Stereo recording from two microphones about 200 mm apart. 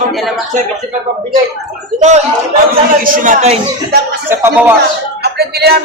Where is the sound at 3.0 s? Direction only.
40° right (ahead or behind).